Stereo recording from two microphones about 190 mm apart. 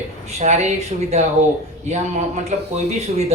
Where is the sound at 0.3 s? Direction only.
35° right (ahead or behind).